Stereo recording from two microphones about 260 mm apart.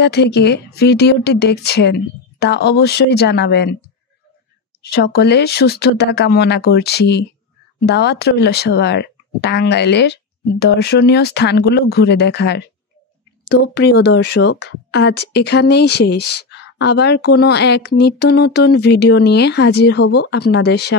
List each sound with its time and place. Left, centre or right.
0.0 s speech: left
4.8 s speech: left
13.7 s speech: left